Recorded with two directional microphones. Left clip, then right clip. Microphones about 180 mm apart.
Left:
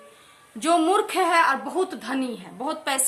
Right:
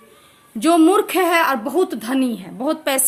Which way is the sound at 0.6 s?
30° right (ahead or behind).